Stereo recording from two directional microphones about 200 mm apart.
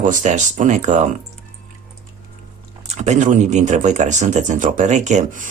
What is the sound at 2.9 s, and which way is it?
Speech, 35° right (ahead or behind).